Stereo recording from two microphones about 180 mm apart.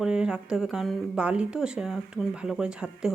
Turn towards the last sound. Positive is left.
turn(degrees=-5)  # may be behind; listen again after turning